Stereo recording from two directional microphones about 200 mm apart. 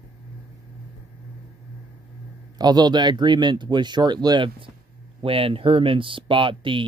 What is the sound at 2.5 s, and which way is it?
Speech, 20° right (ahead or behind).